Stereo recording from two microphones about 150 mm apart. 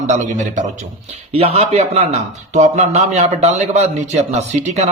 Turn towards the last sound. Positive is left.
turn(degrees=-50)  # may be behind; listen again after turning